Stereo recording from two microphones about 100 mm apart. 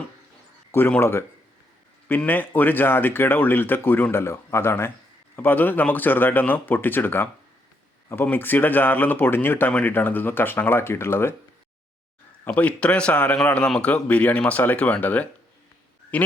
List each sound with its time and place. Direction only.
0.7 s speech: 20° left (ahead or behind)
12.5 s a man's voice: 15° left (ahead or behind)